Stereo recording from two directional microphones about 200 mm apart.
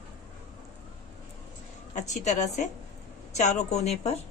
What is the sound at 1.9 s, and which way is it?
A woman's voice, 35° left (ahead or behind).